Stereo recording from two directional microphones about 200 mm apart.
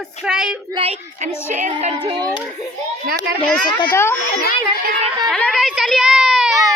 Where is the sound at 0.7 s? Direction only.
30° right (ahead or behind).